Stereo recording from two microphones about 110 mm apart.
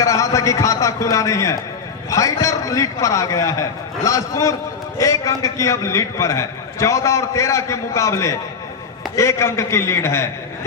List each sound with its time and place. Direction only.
0.0 s a man's voice: 30° left (ahead or behind)